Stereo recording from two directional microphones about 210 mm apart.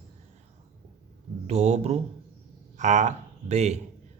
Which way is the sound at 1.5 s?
30° right (ahead or behind).